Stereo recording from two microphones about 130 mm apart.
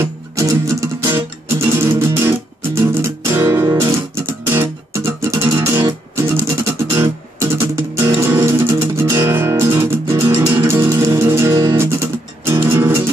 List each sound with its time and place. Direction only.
0.0 s music: 25° right (ahead or behind)